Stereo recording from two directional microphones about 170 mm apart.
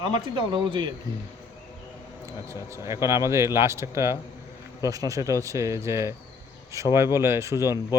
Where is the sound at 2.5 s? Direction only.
15° right (ahead or behind).